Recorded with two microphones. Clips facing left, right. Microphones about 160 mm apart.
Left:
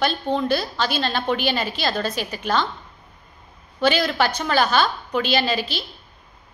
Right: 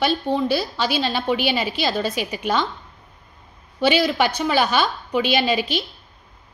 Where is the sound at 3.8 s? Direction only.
10° right (ahead or behind).